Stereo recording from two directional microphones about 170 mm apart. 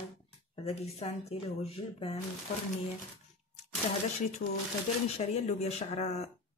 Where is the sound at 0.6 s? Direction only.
35° left (ahead or behind).